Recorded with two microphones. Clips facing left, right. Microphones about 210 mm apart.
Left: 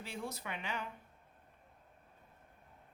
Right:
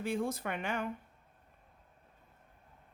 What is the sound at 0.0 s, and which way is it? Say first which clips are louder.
Speech: right 9 dB; 50° right (ahead or behind).